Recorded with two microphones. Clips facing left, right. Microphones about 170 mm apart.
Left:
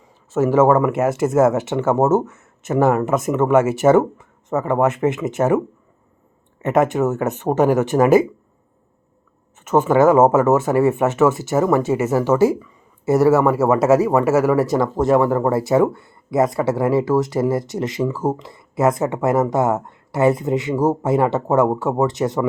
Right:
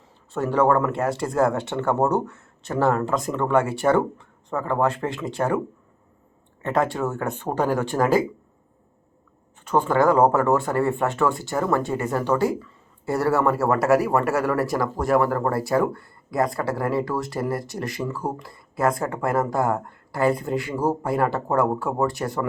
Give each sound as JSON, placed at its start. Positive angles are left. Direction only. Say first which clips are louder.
{"t": 0.5, "sound": "speech", "louder": "left 4 dB", "side_deg": 20}
{"t": 6.6, "sound": "speech", "louder": "left 6 dB", "side_deg": 20}
{"t": 9.6, "sound": "speech", "louder": "left 5 dB", "side_deg": 20}